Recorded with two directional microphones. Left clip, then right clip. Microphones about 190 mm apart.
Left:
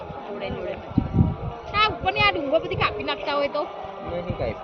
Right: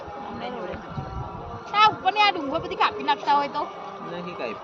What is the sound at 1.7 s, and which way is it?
A woman's voice, 25° right (ahead or behind).